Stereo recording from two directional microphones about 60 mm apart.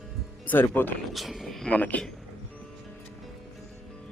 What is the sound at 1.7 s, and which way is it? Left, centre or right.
Speech, left.